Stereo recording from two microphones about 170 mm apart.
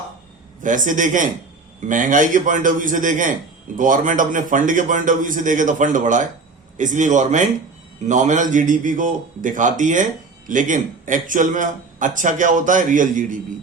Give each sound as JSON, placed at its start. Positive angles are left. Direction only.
{"t": 0.6, "sound": "a man's voice", "side_deg": -50}